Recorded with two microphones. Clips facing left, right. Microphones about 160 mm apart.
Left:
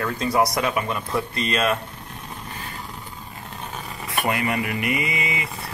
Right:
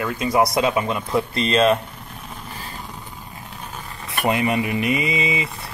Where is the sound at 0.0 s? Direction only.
15° right (ahead or behind).